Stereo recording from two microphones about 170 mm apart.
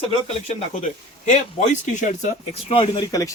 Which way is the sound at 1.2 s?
40° left (ahead or behind).